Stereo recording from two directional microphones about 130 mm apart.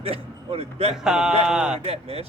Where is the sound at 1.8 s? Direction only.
50° right (ahead or behind).